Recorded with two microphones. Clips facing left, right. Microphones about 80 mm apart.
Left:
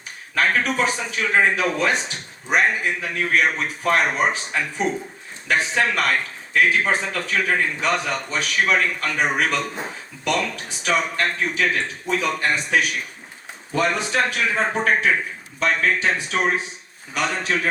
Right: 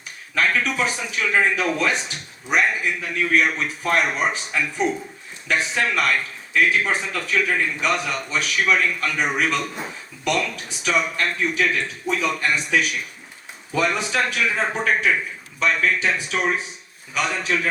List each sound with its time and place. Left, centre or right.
0.3 s speech: left